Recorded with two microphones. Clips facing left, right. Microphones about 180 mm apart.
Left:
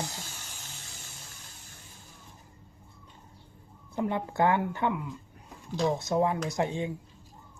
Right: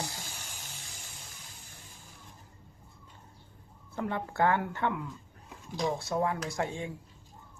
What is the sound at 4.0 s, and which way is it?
Speech, 20° left (ahead or behind).